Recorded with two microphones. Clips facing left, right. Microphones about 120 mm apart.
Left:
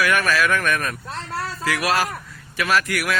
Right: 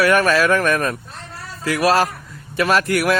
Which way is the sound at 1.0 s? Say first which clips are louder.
Left 7 dB; 90° left.